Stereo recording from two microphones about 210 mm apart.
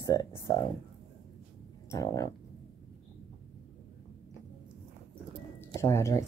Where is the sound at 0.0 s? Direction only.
15° left (ahead or behind).